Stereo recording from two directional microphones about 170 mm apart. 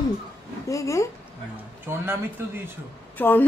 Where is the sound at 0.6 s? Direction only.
20° left (ahead or behind).